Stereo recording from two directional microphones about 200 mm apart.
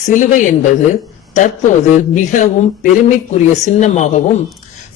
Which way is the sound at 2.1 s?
40° left (ahead or behind).